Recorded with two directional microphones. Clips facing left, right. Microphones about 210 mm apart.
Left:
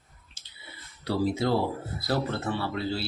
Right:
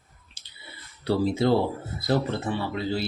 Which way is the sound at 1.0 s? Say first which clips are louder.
Right 3 dB; 25° right (ahead or behind).